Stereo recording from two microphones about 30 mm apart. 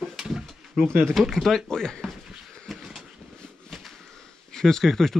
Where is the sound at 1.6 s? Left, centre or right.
Centre.